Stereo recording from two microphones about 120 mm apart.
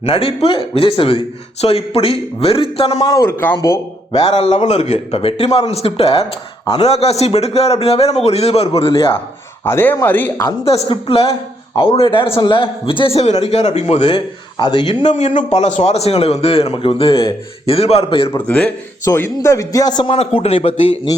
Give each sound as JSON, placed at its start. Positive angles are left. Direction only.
{"t": 0.0, "sound": "a man's voice", "side_deg": 55}
{"t": 3.0, "sound": "a man's voice", "side_deg": 30}
{"t": 3.2, "sound": "a man's voice", "side_deg": 20}
{"t": 3.6, "sound": "speech", "side_deg": 30}
{"t": 4.4, "sound": "a man's voice", "side_deg": 75}
{"t": 9.6, "sound": "speech", "side_deg": 20}
{"t": 10.7, "sound": "a man's voice", "side_deg": 55}
{"t": 14.6, "sound": "speech", "side_deg": 40}
{"t": 15.0, "sound": "a man's voice", "side_deg": 80}
{"t": 15.5, "sound": "a man's voice", "side_deg": 75}
{"t": 18.3, "sound": "speech", "side_deg": 15}
{"t": 19.0, "sound": "a man's voice", "side_deg": 25}
{"t": 20.1, "sound": "a man's voice", "side_deg": 55}